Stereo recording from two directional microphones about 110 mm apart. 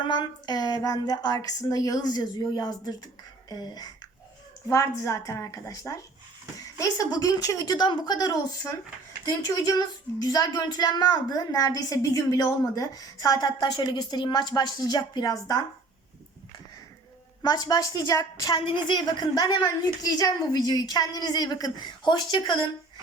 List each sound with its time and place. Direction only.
0.1 s speech: 40° left (ahead or behind)
4.7 s a woman's voice: 25° left (ahead or behind)
17.4 s speech: 40° left (ahead or behind)
18.5 s speech: 50° left (ahead or behind)